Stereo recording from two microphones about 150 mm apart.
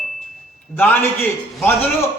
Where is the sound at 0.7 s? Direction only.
10° left (ahead or behind).